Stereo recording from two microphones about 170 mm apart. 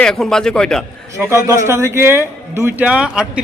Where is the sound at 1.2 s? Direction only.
15° right (ahead or behind).